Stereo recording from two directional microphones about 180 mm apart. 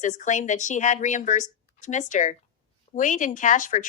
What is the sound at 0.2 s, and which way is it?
Speech, 40° left (ahead or behind).